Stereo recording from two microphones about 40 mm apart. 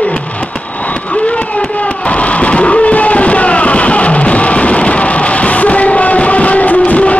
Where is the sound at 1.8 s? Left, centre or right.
Left.